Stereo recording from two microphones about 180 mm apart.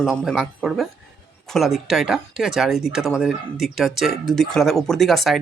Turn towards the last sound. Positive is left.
turn(degrees=0)  # may be behind; listen again after turning